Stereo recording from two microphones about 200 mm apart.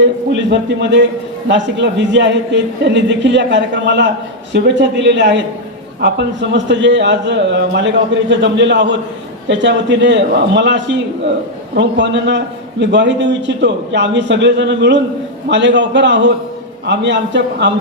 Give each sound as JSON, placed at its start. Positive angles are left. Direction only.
{"t": 0.0, "sound": "a man's voice", "side_deg": -60}